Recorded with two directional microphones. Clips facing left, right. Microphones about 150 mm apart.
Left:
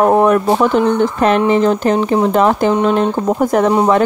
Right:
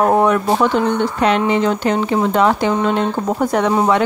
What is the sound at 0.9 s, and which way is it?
Speech, 45° left (ahead or behind).